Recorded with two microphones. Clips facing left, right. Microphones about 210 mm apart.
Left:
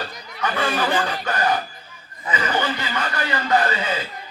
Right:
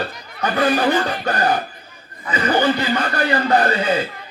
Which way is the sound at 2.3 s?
35° right (ahead or behind).